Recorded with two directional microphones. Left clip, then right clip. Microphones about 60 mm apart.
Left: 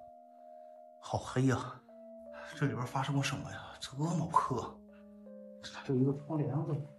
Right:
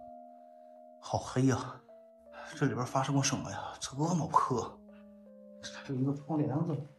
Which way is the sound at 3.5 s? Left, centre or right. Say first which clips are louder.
Right 5 dB; right.